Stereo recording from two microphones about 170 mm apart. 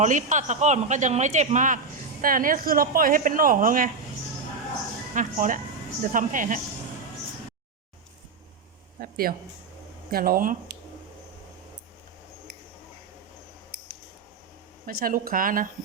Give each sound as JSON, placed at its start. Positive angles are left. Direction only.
{"t": 0.0, "sound": "a man's voice", "side_deg": -45}
{"t": 5.1, "sound": "a man's voice", "side_deg": -50}
{"t": 9.0, "sound": "speech", "side_deg": -60}
{"t": 14.8, "sound": "speech", "side_deg": -60}